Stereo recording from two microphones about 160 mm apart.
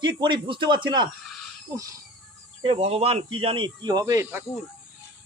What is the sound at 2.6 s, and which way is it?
Speech, 35° right (ahead or behind).